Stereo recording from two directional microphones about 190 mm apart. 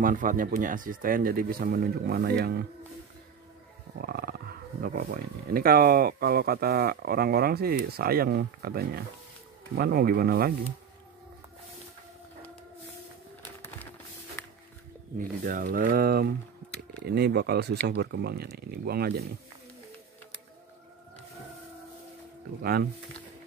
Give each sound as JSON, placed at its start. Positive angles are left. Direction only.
{"t": 0.0, "sound": "speech", "side_deg": -45}
{"t": 4.0, "sound": "speech", "side_deg": -55}
{"t": 13.4, "sound": "a sound", "side_deg": 10}
{"t": 15.1, "sound": "speech", "side_deg": -50}
{"t": 22.6, "sound": "speech", "side_deg": -55}